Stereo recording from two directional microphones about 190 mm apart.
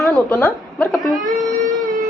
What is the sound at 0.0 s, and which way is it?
Speech, centre (ahead or behind).